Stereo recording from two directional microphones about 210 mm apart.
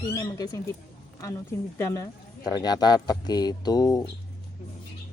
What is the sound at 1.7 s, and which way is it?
Speech, 15° left (ahead or behind).